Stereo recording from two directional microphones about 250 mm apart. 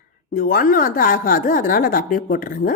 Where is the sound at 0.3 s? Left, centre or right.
Left.